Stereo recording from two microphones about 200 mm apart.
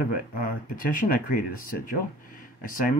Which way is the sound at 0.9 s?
45° left (ahead or behind).